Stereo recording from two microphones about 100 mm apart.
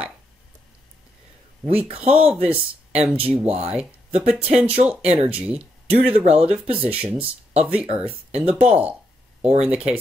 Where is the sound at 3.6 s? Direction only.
10° right (ahead or behind).